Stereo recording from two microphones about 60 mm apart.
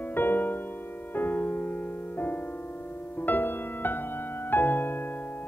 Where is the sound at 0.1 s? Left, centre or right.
Left.